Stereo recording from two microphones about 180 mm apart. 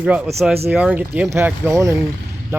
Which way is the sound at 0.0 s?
5° right (ahead or behind).